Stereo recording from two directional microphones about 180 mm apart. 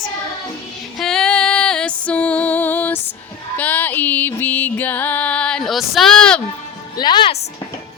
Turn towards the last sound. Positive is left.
turn(degrees=25)  # may be behind; listen again after turning